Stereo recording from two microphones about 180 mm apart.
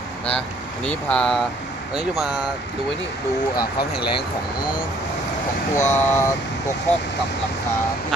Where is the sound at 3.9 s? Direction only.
65° left (ahead or behind).